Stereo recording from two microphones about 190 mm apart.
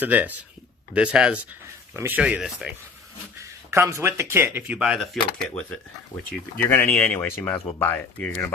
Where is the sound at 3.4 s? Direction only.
15° right (ahead or behind); by 5.8 s 5° left (ahead or behind).